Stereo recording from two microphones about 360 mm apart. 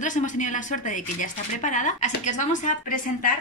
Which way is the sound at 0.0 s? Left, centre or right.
Left.